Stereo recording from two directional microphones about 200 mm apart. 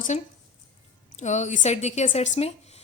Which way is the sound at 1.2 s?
35° left (ahead or behind).